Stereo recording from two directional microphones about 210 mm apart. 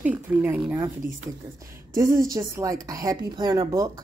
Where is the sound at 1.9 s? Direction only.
15° right (ahead or behind).